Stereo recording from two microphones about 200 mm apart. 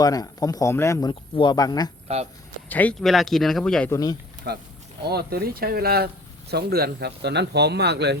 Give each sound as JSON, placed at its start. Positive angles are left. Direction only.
{"t": 0.0, "sound": "speech", "side_deg": 20}
{"t": 2.1, "sound": "speech", "side_deg": -30}
{"t": 2.6, "sound": "speech", "side_deg": 10}
{"t": 3.9, "sound": "speech", "side_deg": 20}
{"t": 4.4, "sound": "speech", "side_deg": -50}